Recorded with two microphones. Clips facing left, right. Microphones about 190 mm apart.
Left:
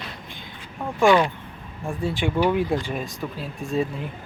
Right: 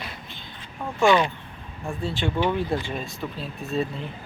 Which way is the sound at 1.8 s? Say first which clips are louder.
Left 2 dB; 15° left (ahead or behind).